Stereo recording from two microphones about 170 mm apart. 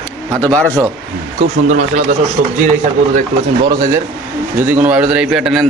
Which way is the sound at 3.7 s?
20° right (ahead or behind).